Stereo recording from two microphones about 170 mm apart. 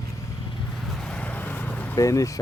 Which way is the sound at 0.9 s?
5° left (ahead or behind).